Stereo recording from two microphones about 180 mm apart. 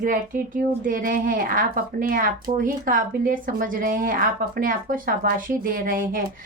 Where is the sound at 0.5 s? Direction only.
50° right (ahead or behind).